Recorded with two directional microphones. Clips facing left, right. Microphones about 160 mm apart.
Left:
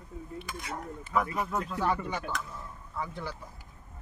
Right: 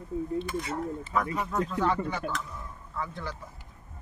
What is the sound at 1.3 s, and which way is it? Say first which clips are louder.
Speech: right 3 dB; 10° left (ahead or behind).